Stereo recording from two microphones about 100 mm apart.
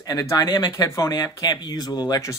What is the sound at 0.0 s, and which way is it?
Speech, 40° left (ahead or behind).